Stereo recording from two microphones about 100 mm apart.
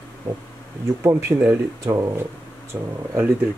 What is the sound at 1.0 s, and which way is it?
Speech, 30° right (ahead or behind).